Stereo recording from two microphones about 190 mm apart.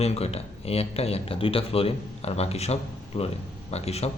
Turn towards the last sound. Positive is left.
turn(degrees=35)  # may be behind; listen again after turning